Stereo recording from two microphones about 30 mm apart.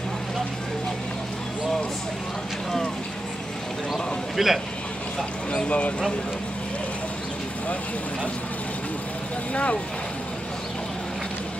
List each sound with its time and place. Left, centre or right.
3.9 s a sound: centre
5.7 s speech: left
9.5 s speech: left